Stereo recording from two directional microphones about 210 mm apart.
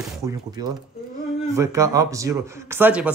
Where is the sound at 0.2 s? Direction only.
15° right (ahead or behind).